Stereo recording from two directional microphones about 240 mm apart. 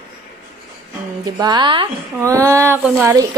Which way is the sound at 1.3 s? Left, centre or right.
Centre.